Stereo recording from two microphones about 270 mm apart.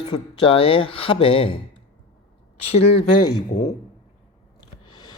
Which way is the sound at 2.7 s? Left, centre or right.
Left.